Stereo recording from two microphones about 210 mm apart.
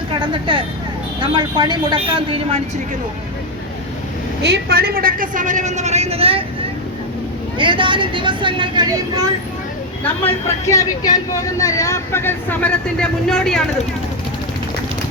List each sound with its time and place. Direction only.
0.2 s speech: 25° right (ahead or behind)
4.4 s a woman's voice: 50° right (ahead or behind); by 6.4 s 25° right (ahead or behind)
7.6 s speech: 25° right (ahead or behind)
10.7 s speech: 15° left (ahead or behind)